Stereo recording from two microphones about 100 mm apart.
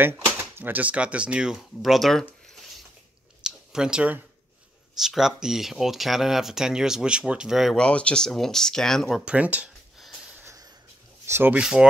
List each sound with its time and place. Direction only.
0.0 s speech: 20° right (ahead or behind); by 2.2 s centre (ahead or behind)
3.4 s a sound: 5° right (ahead or behind)
4.9 s speech: 5° right (ahead or behind)
9.2 s speech: 10° right (ahead or behind)
9.9 s wheeze: 5° right (ahead or behind)
11.2 s speech: 25° right (ahead or behind)
11.5 s speech: 10° right (ahead or behind)